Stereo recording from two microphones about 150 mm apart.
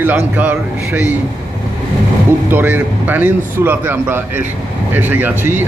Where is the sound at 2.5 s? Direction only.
10° right (ahead or behind).